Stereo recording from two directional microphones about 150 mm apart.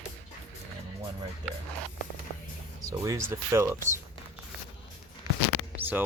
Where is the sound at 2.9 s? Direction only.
20° right (ahead or behind).